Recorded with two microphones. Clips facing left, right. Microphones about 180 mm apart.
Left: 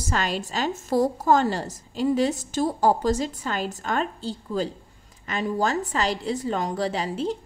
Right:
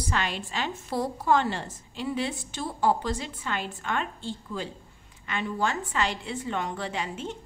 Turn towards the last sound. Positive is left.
turn(degrees=35)  # may be behind; listen again after turning